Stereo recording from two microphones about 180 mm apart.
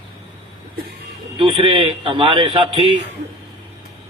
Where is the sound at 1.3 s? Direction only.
30° right (ahead or behind).